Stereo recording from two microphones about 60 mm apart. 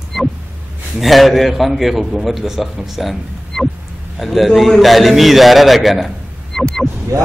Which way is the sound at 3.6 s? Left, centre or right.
Centre.